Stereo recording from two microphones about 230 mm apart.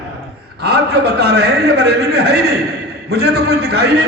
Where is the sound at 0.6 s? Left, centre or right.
Right.